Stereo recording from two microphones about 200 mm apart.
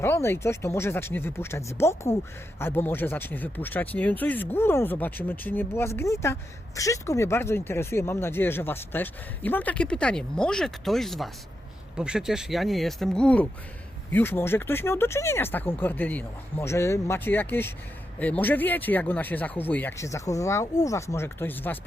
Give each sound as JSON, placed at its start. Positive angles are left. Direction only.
{"t": 0.0, "sound": "speech", "side_deg": 10}